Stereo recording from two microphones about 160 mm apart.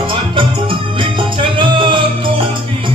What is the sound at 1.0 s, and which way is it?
Music, 30° right (ahead or behind).